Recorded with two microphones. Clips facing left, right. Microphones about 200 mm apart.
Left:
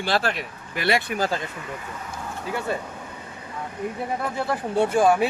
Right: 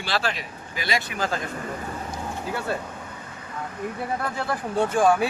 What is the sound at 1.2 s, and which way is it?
Speech, 35° left (ahead or behind).